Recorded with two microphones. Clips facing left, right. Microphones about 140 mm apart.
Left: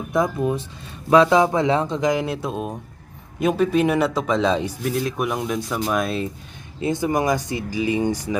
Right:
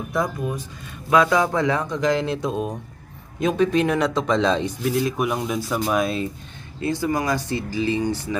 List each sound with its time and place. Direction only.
0.1 s speech: 25° left (ahead or behind); by 6.2 s centre (ahead or behind)
6.7 s speech: 20° left (ahead or behind)